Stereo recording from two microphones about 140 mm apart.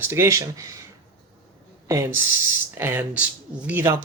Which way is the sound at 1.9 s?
20° right (ahead or behind).